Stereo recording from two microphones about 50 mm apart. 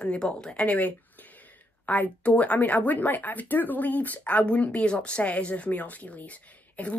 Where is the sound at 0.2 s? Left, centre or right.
Centre.